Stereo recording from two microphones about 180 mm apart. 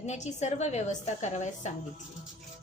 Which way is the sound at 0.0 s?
40° left (ahead or behind).